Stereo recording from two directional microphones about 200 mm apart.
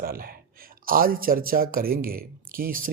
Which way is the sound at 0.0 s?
45° right (ahead or behind).